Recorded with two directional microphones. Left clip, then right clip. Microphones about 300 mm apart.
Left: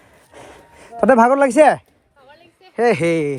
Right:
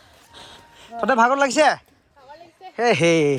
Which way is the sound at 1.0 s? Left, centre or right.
Centre.